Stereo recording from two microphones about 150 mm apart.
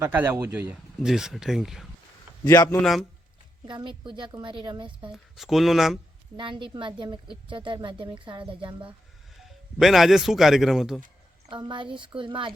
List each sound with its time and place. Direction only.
0.0 s speech: 10° right (ahead or behind)
2.4 s speech: 25° left (ahead or behind)
2.6 s speech: centre (ahead or behind)
3.7 s a woman's voice: 30° right (ahead or behind)
5.1 s speech: centre (ahead or behind)
6.3 s a woman's voice: 35° right (ahead or behind)
9.4 s speech: centre (ahead or behind)
11.4 s a woman's voice: 30° right (ahead or behind)